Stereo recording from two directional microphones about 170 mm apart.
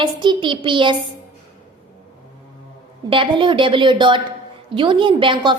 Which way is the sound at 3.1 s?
30° right (ahead or behind).